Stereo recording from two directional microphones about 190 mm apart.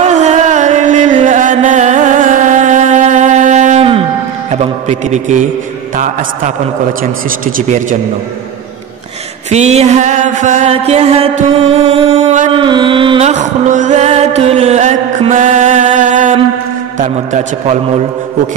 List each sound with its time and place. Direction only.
0.0 s music: 35° right (ahead or behind)
7.0 s a man's voice: 45° right (ahead or behind)
9.5 s music: 35° right (ahead or behind)
12.5 s a sound: 25° right (ahead or behind)
13.3 s music: 40° right (ahead or behind)